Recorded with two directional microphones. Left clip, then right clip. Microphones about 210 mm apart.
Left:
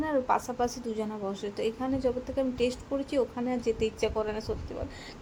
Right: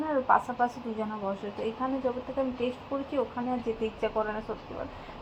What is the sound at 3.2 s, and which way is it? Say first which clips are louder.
A woman's voice: left 1 dB; 5° left (ahead or behind).